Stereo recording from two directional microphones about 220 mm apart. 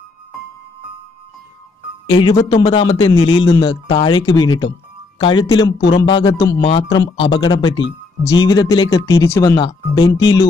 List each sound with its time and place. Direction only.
2.1 s speech: 20° left (ahead or behind)